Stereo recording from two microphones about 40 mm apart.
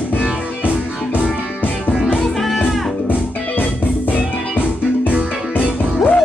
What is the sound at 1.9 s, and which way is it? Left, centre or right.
Music, centre.